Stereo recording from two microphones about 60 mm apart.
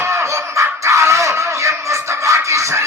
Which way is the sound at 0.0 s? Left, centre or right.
Right.